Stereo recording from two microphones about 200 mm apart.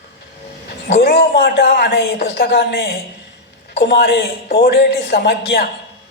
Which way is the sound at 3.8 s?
55° left (ahead or behind).